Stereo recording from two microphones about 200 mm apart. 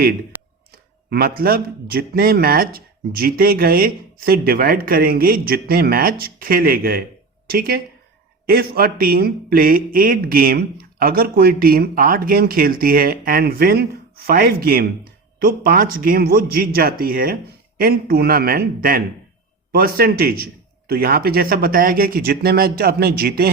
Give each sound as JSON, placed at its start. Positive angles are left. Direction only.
{"t": 1.1, "sound": "speech", "side_deg": -50}